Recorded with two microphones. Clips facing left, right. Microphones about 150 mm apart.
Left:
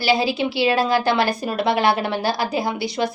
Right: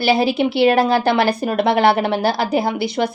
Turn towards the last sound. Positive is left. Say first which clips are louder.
# right 3 dB
turn(degrees=-60)  # may be behind; listen again after turning